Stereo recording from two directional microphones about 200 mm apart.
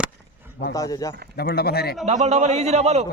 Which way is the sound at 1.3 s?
50° left (ahead or behind).